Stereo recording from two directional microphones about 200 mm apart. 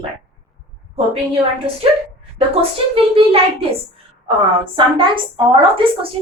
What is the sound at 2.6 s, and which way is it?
A woman's voice, 30° right (ahead or behind).